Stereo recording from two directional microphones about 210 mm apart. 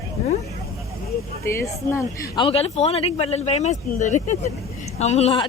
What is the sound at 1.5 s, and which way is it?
A woman's voice, 10° left (ahead or behind).